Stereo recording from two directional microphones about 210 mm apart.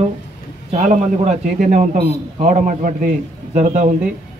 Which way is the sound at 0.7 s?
35° right (ahead or behind).